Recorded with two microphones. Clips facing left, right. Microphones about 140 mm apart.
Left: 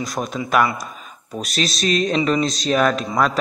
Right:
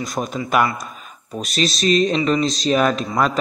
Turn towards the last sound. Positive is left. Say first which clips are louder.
# even
turn(degrees=0)  # may be behind; listen again after turning